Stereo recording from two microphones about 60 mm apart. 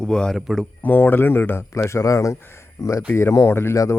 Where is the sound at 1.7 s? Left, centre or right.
Left.